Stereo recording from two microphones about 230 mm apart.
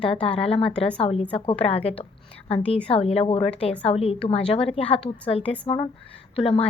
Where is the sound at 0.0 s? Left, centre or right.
Left.